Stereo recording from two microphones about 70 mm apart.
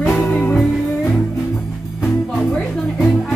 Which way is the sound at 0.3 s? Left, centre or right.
Left.